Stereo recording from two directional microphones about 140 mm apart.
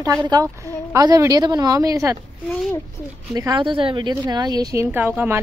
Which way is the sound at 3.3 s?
30° right (ahead or behind).